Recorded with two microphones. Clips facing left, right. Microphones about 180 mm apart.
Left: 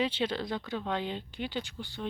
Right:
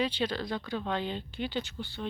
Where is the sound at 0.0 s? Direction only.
25° left (ahead or behind).